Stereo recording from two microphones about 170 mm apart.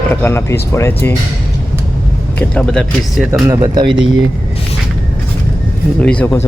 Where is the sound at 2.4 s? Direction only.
5° left (ahead or behind).